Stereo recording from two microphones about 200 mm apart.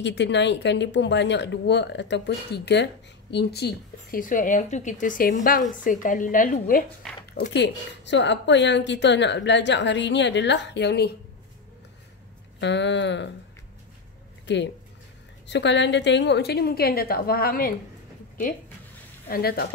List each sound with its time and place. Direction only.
0.0 s speech: 60° left (ahead or behind); by 6.8 s 40° left (ahead or behind)
7.3 s speech: 60° left (ahead or behind)
12.5 s speech: 60° left (ahead or behind)
14.4 s a sound: 60° left (ahead or behind)
15.4 s speech: 60° left (ahead or behind)
19.2 s speech: 45° left (ahead or behind)